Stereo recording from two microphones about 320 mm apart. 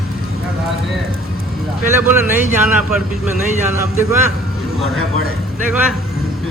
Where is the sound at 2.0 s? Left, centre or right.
Centre.